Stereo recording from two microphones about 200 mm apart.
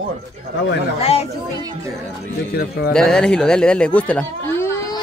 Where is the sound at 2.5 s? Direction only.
50° left (ahead or behind).